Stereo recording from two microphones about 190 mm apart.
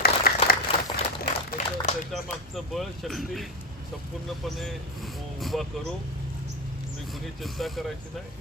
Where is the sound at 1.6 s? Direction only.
35° left (ahead or behind).